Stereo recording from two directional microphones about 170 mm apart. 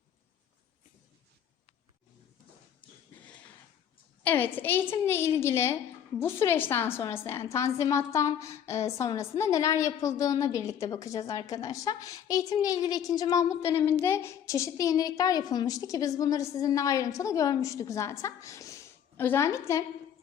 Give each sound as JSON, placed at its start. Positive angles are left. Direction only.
{"t": 4.2, "sound": "a woman's voice", "side_deg": 10}